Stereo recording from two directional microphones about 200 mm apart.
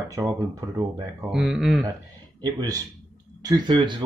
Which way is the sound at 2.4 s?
20° right (ahead or behind).